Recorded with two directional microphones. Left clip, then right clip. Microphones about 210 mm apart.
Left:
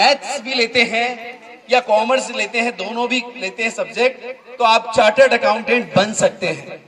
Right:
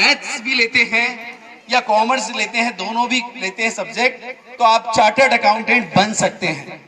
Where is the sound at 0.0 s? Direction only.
35° left (ahead or behind).